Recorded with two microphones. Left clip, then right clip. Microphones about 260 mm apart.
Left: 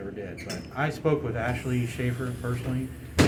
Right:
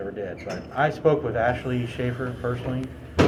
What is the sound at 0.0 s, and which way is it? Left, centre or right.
Speech, left.